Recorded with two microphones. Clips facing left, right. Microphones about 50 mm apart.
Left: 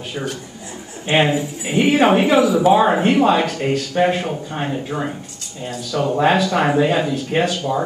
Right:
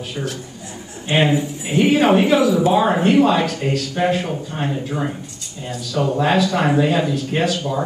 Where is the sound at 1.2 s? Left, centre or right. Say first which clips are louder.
Right 1 dB; centre.